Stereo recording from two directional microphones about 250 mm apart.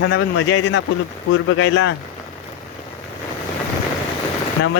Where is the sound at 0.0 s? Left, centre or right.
Left.